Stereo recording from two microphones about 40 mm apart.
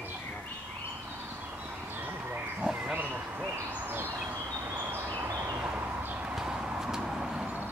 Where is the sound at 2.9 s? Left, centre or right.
Right.